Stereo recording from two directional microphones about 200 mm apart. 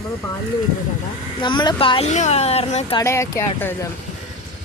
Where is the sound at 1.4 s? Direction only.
20° left (ahead or behind).